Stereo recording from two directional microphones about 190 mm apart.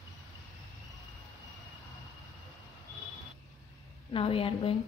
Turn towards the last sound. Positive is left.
turn(degrees=30)  # may be behind; listen again after turning